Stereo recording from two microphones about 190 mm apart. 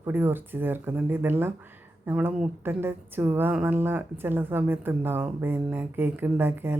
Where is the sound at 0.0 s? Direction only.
10° right (ahead or behind).